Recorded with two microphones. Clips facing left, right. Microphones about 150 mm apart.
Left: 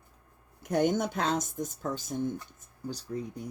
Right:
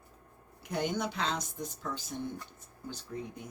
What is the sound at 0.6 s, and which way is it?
Speech, 50° left (ahead or behind).